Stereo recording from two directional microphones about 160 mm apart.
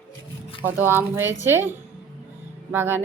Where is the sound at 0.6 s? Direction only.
15° right (ahead or behind).